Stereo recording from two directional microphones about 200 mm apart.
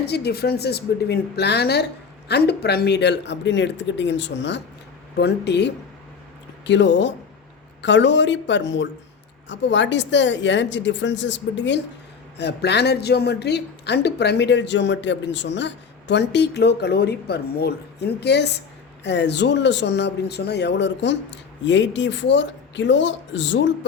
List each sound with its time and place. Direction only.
0.0 s speech: 55° left (ahead or behind)